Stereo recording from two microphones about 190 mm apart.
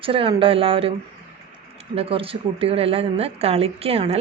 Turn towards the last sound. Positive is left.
turn(degrees=-30)  # may be behind; listen again after turning